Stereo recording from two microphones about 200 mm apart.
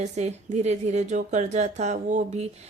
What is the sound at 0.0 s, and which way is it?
Speech, 35° right (ahead or behind).